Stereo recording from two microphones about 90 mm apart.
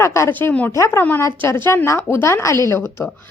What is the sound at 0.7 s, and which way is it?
Speech, 35° left (ahead or behind).